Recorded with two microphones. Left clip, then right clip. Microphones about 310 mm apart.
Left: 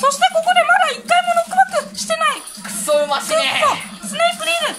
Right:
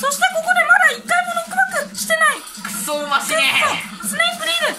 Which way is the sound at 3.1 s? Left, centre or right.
Centre.